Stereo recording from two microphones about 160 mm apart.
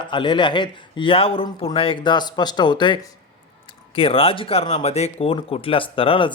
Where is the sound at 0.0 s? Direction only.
30° left (ahead or behind).